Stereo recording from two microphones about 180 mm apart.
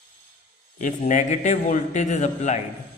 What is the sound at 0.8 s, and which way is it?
A man's voice, 45° left (ahead or behind).